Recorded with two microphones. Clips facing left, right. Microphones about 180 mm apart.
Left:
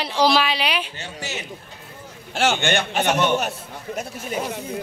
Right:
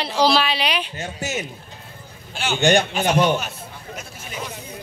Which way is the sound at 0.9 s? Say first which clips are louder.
Right 5 dB; 40° right (ahead or behind).